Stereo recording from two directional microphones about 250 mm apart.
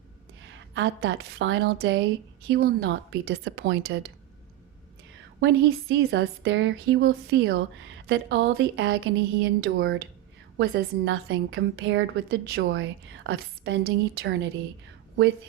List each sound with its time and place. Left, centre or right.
0.7 s a woman's voice: right
5.4 s a woman's voice: right